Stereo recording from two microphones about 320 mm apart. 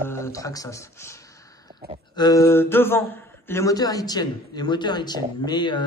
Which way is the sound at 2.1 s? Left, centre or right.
Centre.